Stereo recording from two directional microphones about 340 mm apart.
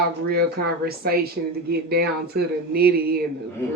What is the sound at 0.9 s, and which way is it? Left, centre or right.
Speech, right.